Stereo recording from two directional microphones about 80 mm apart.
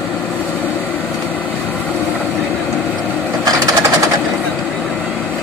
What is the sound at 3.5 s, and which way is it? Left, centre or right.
Sewing machine, right.